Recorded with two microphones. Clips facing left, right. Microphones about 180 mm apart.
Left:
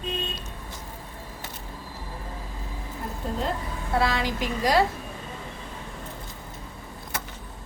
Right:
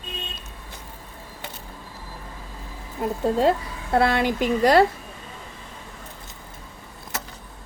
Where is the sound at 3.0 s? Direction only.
80° right.